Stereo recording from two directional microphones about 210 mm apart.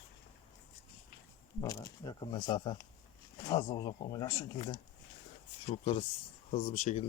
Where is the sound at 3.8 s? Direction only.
25° left (ahead or behind).